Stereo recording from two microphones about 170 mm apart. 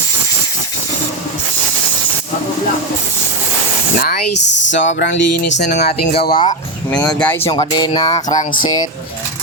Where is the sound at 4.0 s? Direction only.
75° left (ahead or behind); by 5.7 s 90° left.